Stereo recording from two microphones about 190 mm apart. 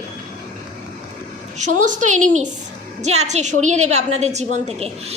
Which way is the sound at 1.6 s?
40° right (ahead or behind).